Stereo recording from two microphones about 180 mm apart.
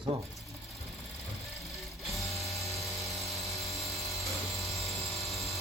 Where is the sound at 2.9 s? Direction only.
Centre (ahead or behind).